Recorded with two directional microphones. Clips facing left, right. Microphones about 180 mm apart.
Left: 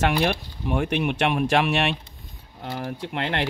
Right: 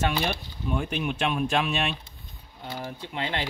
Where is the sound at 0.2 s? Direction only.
65° left (ahead or behind).